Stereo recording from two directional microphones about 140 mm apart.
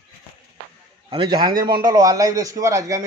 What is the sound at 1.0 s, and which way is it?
A man's voice, 30° right (ahead or behind).